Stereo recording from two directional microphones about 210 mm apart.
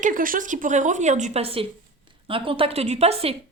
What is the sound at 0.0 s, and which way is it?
A woman's voice, 40° right (ahead or behind).